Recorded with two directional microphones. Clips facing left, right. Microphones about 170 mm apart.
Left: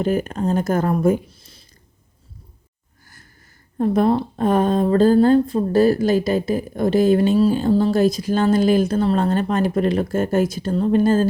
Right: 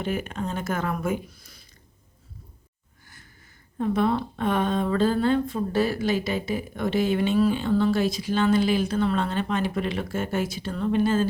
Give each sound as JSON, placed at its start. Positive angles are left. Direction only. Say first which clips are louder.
{"t": 0.0, "sound": "speech", "louder": "left 8 dB", "side_deg": 40}
{"t": 3.8, "sound": "speech", "louder": "left 6 dB", "side_deg": 40}